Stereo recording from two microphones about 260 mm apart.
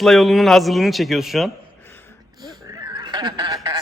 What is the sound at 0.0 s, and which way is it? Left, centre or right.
A man's voice, centre.